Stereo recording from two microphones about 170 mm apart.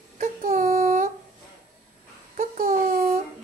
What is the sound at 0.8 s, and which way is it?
Humming, 45° right (ahead or behind).